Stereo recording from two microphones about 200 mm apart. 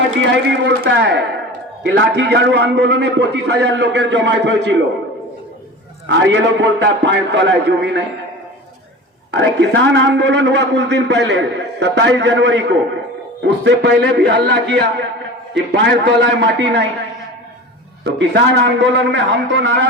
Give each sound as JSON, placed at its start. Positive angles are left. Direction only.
{"t": 0.2, "sound": "a man's voice", "side_deg": -60}
{"t": 6.1, "sound": "a man's voice", "side_deg": -65}
{"t": 9.3, "sound": "a man's voice", "side_deg": -60}
{"t": 18.0, "sound": "a man's voice", "side_deg": -60}